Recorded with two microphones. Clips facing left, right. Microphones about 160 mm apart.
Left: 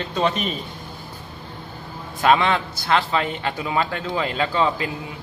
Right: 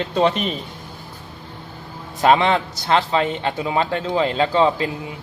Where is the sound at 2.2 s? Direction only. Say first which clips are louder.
Right 2 dB; 30° right (ahead or behind).